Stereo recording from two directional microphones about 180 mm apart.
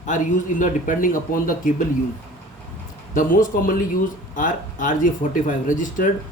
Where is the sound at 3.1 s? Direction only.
50° left (ahead or behind).